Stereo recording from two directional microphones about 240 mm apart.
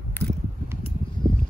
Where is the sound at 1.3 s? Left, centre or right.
Right.